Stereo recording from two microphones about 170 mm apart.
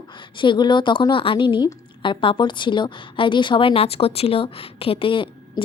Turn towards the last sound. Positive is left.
turn(degrees=30)  # may be behind; listen again after turning